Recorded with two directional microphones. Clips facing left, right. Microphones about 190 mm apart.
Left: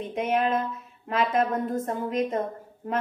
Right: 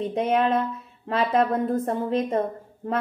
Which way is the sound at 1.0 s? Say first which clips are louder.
Right 2 dB; 35° right (ahead or behind).